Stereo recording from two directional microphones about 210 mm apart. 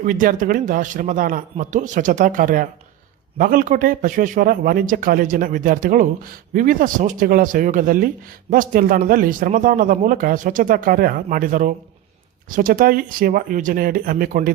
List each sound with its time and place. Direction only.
0.0 s speech: 40° right (ahead or behind)